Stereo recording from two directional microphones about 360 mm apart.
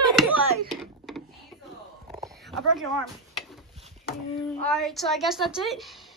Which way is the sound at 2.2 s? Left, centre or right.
Centre.